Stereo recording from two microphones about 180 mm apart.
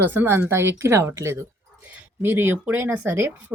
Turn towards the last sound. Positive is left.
turn(degrees=-10)  # may be behind; listen again after turning